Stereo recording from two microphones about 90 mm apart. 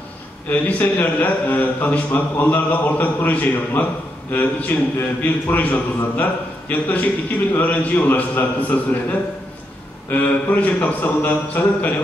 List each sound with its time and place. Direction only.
0.5 s a man's voice: 20° left (ahead or behind)
10.0 s a man's voice: 20° left (ahead or behind)